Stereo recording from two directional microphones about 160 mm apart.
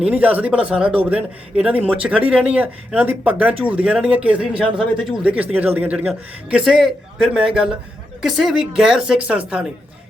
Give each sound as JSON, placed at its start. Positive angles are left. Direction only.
{"t": 0.0, "sound": "a woman's voice", "side_deg": -10}